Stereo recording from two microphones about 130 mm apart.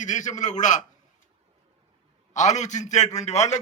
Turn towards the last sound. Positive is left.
turn(degrees=60)  # may be behind; listen again after turning